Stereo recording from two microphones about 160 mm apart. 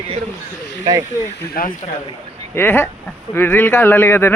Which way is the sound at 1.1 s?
60° left (ahead or behind).